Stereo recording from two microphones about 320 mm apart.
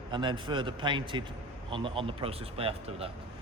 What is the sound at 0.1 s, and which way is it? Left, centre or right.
Speech, centre.